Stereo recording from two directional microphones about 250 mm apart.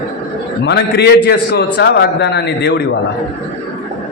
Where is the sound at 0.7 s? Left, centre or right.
Left.